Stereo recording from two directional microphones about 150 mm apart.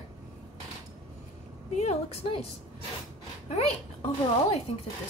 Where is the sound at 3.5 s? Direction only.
45° left (ahead or behind).